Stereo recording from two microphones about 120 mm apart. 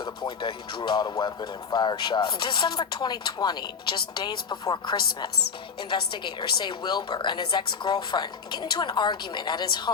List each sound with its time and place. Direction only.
0.0 s speech: 45° left (ahead or behind)